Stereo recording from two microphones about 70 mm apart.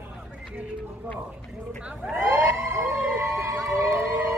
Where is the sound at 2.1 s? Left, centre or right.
Right.